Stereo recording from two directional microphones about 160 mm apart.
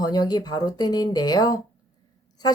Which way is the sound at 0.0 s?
25° left (ahead or behind).